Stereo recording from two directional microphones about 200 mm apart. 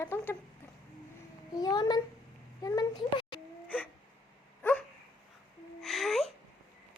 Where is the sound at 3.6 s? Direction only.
5° left (ahead or behind).